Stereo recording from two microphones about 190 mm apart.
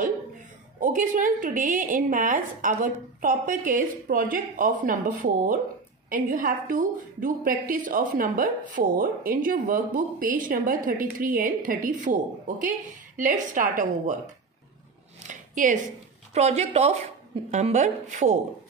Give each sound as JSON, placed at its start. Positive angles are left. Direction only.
{"t": 0.7, "sound": "a woman's voice", "side_deg": -45}
{"t": 15.2, "sound": "a sound", "side_deg": -45}
{"t": 16.3, "sound": "a woman's voice", "side_deg": -35}